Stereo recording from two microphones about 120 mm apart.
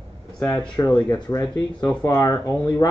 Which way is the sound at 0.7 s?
35° left (ahead or behind).